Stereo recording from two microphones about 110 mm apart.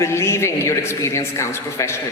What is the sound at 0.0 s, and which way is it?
A man's voice, 25° left (ahead or behind).